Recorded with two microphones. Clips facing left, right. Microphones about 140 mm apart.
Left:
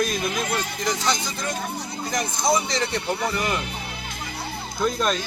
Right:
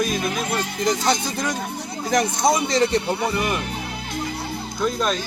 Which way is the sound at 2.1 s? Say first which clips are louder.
Right 7 dB; 85° right.